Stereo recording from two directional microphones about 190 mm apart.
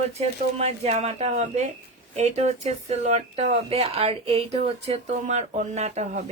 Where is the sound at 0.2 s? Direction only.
35° right (ahead or behind).